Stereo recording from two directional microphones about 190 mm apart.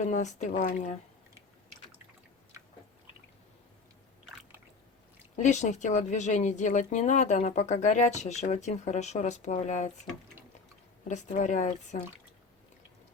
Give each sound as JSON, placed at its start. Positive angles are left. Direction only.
{"t": 0.0, "sound": "speech", "side_deg": 40}
{"t": 5.4, "sound": "speech", "side_deg": 40}
{"t": 11.1, "sound": "speech", "side_deg": 40}